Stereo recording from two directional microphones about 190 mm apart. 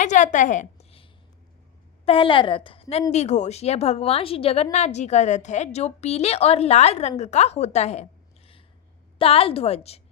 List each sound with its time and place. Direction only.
0.0 s a sound: 40° left (ahead or behind)
2.0 s a woman's voice: 30° left (ahead or behind)
9.1 s a woman's voice: 30° left (ahead or behind)